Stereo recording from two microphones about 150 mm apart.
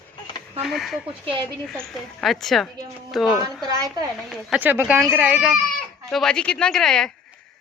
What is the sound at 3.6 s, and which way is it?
Speech, 25° right (ahead or behind).